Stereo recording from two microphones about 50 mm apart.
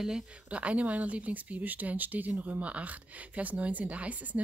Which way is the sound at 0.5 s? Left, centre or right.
Right.